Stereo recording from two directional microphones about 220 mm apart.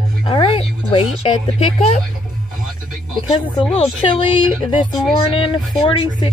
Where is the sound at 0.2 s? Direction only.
25° left (ahead or behind).